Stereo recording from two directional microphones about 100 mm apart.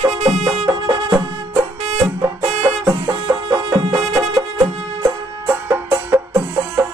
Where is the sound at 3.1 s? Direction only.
45° right (ahead or behind).